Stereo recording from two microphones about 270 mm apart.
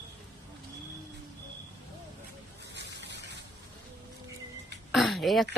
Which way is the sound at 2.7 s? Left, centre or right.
Right.